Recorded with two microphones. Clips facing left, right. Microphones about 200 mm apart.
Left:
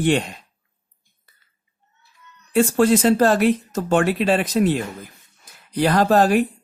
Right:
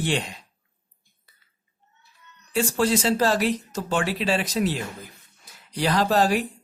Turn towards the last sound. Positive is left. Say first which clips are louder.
# left 5 dB
turn(degrees=55)  # may be behind; listen again after turning